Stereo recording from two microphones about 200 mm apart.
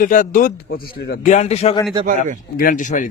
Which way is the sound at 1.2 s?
35° left (ahead or behind).